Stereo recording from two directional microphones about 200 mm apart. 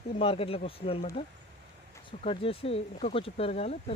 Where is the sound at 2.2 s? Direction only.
30° left (ahead or behind).